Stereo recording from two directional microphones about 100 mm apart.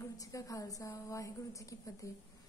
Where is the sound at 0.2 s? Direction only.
35° left (ahead or behind).